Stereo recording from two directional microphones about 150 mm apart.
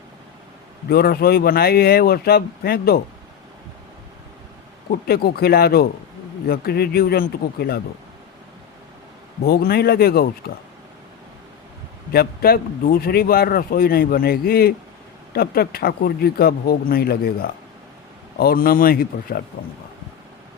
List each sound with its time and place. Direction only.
0.9 s speech: 90° left
4.9 s speech: 90° left
9.4 s speech: 90° left
12.1 s speech: 90° left; by 19.4 s 75° left (ahead or behind)